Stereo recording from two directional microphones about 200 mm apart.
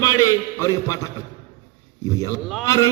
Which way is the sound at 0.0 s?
15° left (ahead or behind).